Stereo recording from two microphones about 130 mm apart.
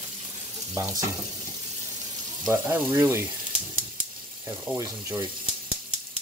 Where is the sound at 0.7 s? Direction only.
25° right (ahead or behind).